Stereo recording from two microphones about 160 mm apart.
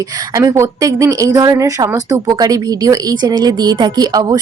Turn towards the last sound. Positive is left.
turn(degrees=-25)  # may be behind; listen again after turning